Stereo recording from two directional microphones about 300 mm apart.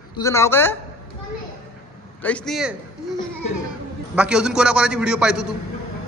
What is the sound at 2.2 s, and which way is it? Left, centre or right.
Speech, centre.